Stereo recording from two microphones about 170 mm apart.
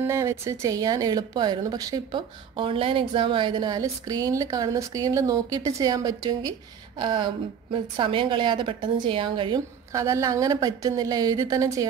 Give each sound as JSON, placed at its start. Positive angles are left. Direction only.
{"t": 0.0, "sound": "a woman's voice", "side_deg": -15}
{"t": 9.9, "sound": "a woman's voice", "side_deg": -20}